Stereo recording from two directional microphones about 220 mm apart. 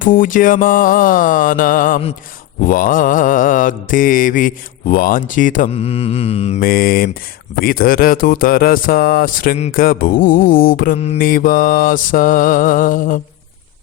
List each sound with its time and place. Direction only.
0.0 s mantra: 40° left (ahead or behind)
6.6 s mantra: 40° left (ahead or behind)